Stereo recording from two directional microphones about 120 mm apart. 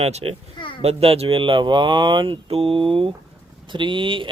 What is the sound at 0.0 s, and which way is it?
Speech, 60° right (ahead or behind).